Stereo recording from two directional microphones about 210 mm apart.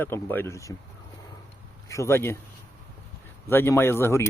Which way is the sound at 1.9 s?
15° left (ahead or behind).